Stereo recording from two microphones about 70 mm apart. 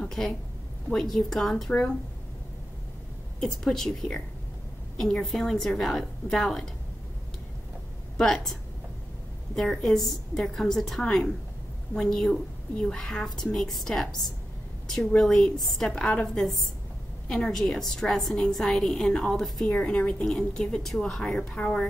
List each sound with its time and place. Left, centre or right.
0.0 s a sound: centre
1.1 s a woman's voice: centre
3.3 s a woman's voice: centre
8.2 s a woman's voice: centre
9.6 s a woman's voice: centre
15.1 s a woman's voice: centre
19.8 s a woman's voice: centre
20.2 s a woman's voice: centre